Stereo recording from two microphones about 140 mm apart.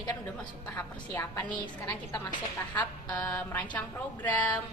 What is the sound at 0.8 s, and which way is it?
Speech, 15° left (ahead or behind).